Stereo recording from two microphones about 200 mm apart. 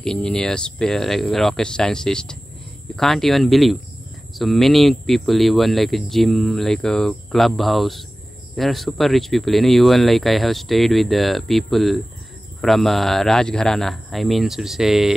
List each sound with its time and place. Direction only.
0.0 s speech: 5° left (ahead or behind)